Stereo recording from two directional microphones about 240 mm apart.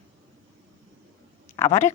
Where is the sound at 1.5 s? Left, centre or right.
Centre.